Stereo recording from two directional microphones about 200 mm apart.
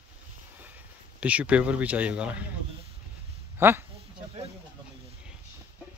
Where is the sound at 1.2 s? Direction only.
5° right (ahead or behind).